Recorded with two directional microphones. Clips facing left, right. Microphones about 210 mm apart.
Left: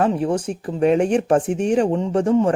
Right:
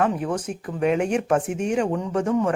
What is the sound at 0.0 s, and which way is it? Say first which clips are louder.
Speech: left 4 dB; 30° left (ahead or behind).